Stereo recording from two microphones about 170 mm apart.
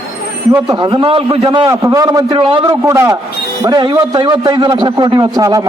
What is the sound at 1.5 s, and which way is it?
A man's voice, 20° right (ahead or behind).